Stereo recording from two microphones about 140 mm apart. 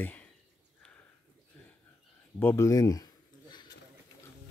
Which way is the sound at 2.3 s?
15° left (ahead or behind).